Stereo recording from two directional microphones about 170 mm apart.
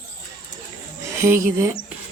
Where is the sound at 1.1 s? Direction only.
15° right (ahead or behind).